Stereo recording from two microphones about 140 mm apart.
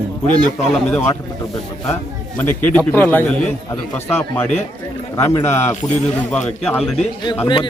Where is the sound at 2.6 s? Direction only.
10° left (ahead or behind).